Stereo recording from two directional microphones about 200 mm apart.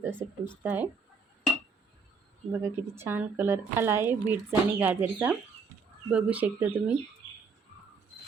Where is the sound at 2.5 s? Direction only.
15° right (ahead or behind).